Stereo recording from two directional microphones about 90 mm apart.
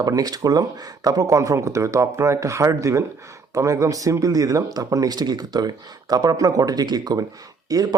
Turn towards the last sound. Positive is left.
turn(degrees=-40)  # may be behind; listen again after turning